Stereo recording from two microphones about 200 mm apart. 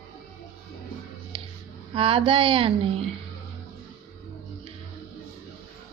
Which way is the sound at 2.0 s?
25° right (ahead or behind).